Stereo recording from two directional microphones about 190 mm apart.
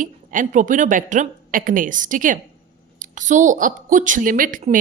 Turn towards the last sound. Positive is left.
turn(degrees=-45)  # may be behind; listen again after turning